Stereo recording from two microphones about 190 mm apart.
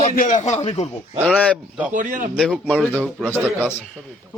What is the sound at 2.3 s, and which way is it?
Speech, centre (ahead or behind).